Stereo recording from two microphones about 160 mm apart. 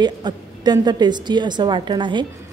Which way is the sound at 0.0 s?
25° right (ahead or behind).